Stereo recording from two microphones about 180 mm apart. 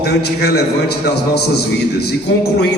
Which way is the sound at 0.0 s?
65° left (ahead or behind).